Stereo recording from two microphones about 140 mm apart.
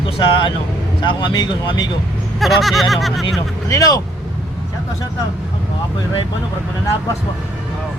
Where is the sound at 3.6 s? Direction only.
25° left (ahead or behind).